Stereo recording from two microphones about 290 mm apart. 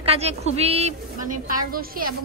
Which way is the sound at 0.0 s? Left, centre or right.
Right.